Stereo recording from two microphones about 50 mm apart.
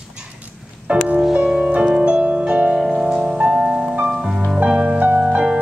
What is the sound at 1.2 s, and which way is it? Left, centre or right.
Music, centre.